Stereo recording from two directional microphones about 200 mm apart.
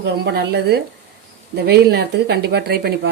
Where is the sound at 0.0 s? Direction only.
55° right (ahead or behind).